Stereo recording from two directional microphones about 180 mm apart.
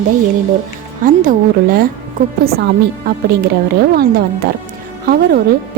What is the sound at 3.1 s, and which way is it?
Speech, 55° right (ahead or behind).